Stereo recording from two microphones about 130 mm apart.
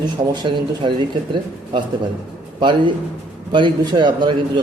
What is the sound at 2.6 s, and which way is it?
Speech, 40° right (ahead or behind).